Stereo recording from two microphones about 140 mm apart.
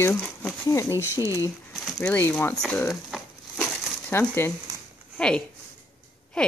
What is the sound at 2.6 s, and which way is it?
Crumpling, 5° left (ahead or behind).